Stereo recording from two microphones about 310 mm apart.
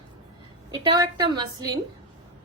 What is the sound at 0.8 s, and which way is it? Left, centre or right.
A woman's voice, centre.